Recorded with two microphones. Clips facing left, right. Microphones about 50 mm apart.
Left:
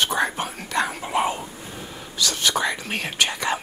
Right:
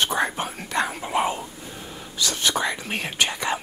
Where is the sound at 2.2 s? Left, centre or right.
Right.